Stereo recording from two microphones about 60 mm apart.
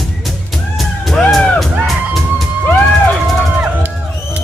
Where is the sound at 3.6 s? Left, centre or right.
Right.